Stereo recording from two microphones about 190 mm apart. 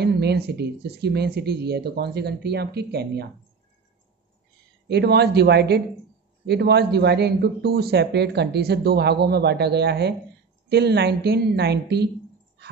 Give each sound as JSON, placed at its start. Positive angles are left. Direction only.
{"t": 0.0, "sound": "speech", "side_deg": -60}
{"t": 4.8, "sound": "speech", "side_deg": -60}